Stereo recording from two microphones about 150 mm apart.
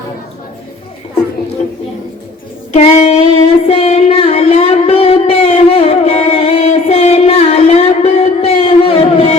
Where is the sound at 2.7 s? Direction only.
45° left (ahead or behind).